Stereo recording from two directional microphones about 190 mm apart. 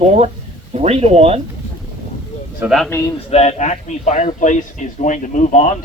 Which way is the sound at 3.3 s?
35° left (ahead or behind).